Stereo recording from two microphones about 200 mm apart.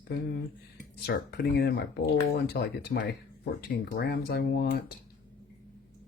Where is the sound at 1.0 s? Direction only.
55° left (ahead or behind).